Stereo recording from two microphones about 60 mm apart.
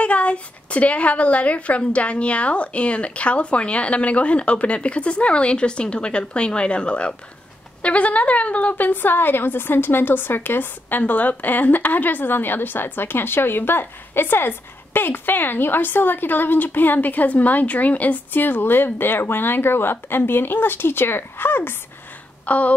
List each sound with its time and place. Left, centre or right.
0.0 s a woman's voice: left
22.5 s a woman's voice: left